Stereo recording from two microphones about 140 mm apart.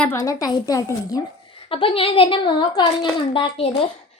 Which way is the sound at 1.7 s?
40° left (ahead or behind).